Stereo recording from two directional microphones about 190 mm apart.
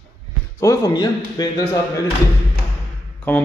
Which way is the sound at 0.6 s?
15° left (ahead or behind).